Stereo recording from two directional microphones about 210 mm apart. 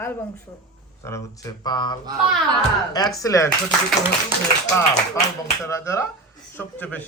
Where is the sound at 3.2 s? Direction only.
15° left (ahead or behind).